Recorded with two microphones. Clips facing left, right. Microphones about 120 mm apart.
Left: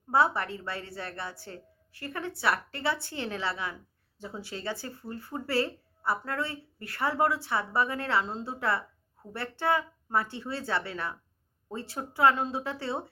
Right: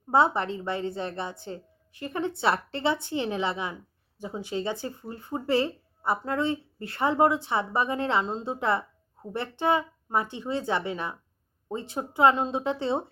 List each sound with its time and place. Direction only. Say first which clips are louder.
0.1 s speech: right 3 dB; 20° right (ahead or behind)